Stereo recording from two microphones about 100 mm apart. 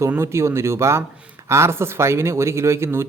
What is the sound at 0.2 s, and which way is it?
Speech, 25° right (ahead or behind).